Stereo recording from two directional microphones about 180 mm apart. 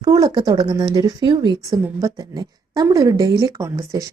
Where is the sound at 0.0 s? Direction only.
20° right (ahead or behind).